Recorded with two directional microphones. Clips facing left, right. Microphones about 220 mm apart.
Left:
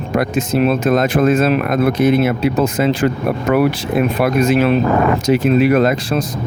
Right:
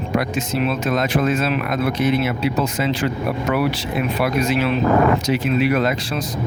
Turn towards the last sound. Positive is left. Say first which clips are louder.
# left 6 dB
turn(degrees=45)  # may be behind; listen again after turning